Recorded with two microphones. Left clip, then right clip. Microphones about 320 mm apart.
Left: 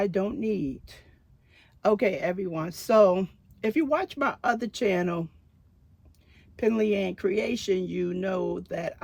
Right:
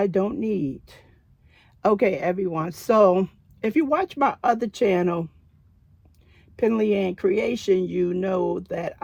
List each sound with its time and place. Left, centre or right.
0.0 s speech: centre
6.3 s speech: centre